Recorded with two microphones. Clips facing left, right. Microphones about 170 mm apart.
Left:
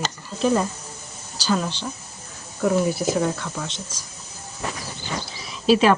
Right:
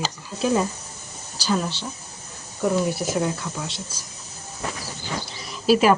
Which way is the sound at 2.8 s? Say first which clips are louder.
Left 2 dB; centre (ahead or behind).